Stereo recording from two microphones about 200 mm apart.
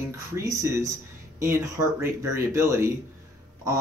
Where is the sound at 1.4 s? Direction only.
10° right (ahead or behind).